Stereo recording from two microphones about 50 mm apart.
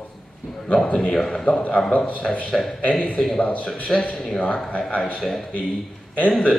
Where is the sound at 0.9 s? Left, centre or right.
Centre.